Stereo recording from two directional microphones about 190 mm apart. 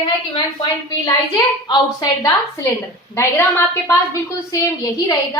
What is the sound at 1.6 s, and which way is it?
Speech, 25° left (ahead or behind).